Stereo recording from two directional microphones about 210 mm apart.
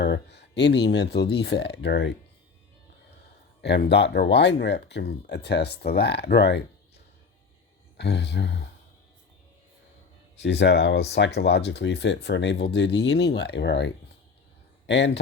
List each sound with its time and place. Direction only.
0.0 s speech: 55° left (ahead or behind)
3.8 s speech: 55° left (ahead or behind)
7.9 s speech: 55° left (ahead or behind)
10.3 s speech: 55° left (ahead or behind)